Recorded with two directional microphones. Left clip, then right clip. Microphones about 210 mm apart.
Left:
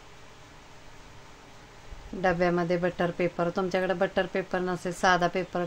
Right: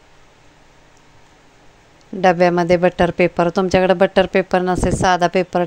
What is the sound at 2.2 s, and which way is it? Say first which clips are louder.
Speech: right 12 dB; 40° right (ahead or behind).